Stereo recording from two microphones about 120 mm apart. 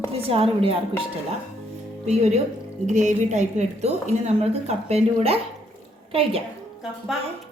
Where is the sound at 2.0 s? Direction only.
65° right (ahead or behind).